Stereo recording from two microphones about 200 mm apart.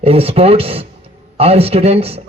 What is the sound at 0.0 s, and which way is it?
Speech, 30° right (ahead or behind).